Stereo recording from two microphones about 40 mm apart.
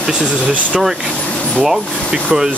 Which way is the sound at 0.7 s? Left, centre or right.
Centre.